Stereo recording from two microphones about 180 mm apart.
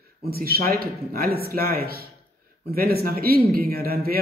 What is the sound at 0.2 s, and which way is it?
A man's voice, 55° right (ahead or behind).